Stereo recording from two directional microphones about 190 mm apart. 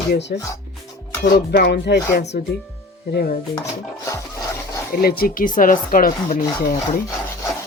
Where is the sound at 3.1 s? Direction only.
55° left (ahead or behind).